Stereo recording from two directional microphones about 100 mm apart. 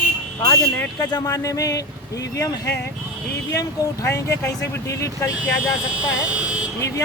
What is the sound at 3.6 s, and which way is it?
Speech, 30° left (ahead or behind).